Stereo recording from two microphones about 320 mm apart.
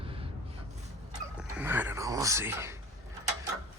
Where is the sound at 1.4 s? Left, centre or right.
Centre.